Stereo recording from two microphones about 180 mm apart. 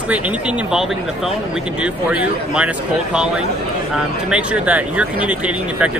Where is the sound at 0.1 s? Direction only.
5° right (ahead or behind).